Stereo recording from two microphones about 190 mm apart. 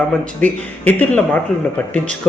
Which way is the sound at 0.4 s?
10° left (ahead or behind).